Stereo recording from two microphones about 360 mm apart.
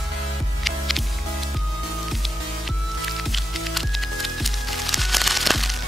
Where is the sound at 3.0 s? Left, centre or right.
Centre.